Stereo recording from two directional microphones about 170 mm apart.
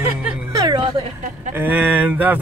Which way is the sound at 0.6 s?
25° right (ahead or behind).